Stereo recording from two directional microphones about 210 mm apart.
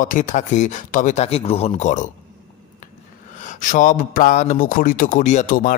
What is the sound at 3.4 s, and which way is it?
Speech, 35° left (ahead or behind).